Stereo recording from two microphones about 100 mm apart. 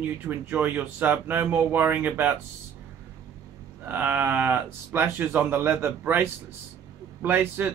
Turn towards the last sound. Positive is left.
turn(degrees=-20)  # may be behind; listen again after turning